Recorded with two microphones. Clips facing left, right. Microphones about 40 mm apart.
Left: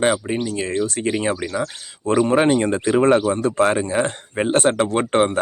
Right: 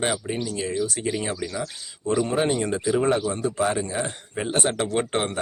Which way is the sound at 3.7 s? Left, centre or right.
Left.